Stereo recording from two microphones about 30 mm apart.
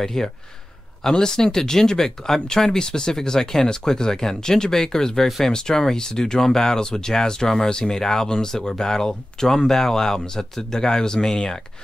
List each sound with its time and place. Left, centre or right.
0.0 s speech: centre